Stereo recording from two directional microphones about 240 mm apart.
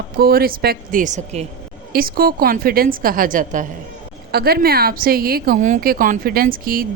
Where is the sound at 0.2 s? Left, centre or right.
Right.